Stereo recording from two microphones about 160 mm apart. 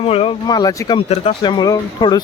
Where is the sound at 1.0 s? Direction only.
40° left (ahead or behind).